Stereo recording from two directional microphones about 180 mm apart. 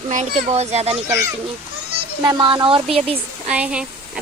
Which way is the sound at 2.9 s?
30° right (ahead or behind).